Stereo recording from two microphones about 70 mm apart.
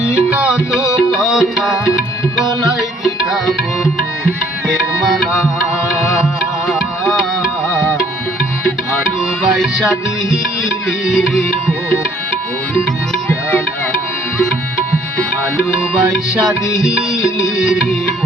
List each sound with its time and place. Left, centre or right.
0.0 s music: centre
1.1 s tabla: centre
4.7 s tabla: centre
6.0 s music: centre
9.4 s music: centre
16.8 s music: centre